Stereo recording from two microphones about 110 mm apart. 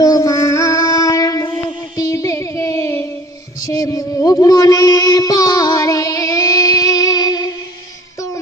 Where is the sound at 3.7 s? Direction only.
30° left (ahead or behind).